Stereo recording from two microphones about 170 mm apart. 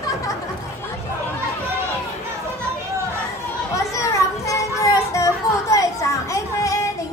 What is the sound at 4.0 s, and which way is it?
Children playing, 20° left (ahead or behind).